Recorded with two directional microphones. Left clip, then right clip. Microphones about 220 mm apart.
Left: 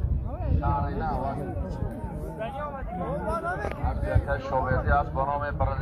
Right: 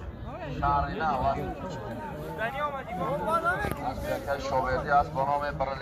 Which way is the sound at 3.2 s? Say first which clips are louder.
Right 4 dB; 5° right (ahead or behind).